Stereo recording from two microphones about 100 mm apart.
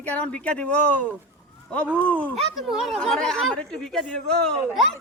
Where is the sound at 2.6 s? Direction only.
5° right (ahead or behind).